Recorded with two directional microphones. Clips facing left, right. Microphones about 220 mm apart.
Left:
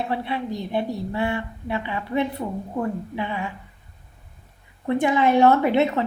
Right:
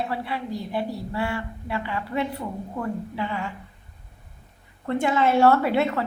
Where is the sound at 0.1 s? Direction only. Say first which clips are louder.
Left 3 dB; 20° left (ahead or behind).